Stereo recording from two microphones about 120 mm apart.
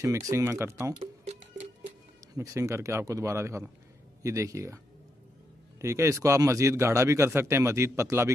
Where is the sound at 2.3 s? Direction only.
25° right (ahead or behind).